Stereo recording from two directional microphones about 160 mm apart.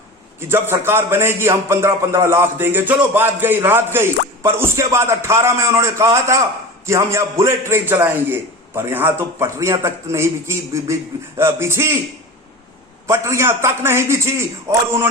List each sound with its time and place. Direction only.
0.3 s a man's voice: 15° right (ahead or behind)
13.1 s a man's voice: 15° right (ahead or behind)